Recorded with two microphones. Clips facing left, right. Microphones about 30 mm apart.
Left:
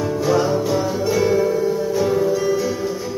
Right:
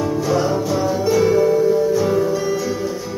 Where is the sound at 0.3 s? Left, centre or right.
Centre.